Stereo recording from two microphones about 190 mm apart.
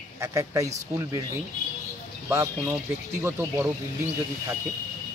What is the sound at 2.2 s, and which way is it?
Speech, 15° right (ahead or behind).